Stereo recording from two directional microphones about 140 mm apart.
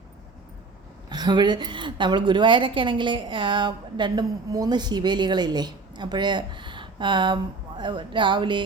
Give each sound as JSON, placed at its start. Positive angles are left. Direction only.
{"t": 1.1, "sound": "a woman's voice", "side_deg": -30}